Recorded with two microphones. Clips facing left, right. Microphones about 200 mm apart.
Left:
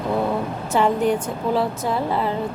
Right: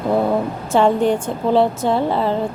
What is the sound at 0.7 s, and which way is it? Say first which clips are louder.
A woman's voice: right 4 dB; 30° right (ahead or behind).